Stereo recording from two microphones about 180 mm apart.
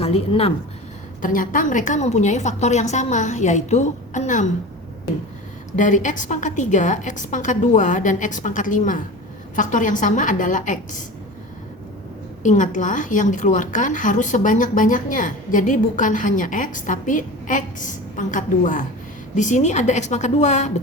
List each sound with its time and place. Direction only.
0.0 s a woman's voice: 35° left (ahead or behind)
1.2 s a woman's voice: 45° left (ahead or behind)
5.7 s a woman's voice: 45° left (ahead or behind)
12.4 s a woman's voice: 40° left (ahead or behind)